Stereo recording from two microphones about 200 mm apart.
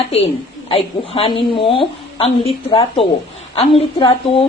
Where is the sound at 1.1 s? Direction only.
25° left (ahead or behind).